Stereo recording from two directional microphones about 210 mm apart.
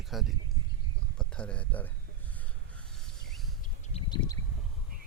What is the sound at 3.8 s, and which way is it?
Bird, 30° left (ahead or behind).